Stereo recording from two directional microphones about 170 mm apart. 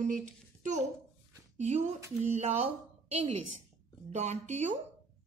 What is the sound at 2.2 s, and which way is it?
A woman's voice, 40° right (ahead or behind).